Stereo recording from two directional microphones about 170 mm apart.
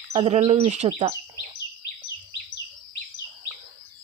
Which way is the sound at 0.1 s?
40° right (ahead or behind).